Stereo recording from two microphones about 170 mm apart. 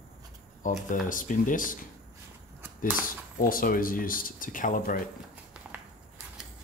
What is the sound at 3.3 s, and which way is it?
Speech, 55° left (ahead or behind).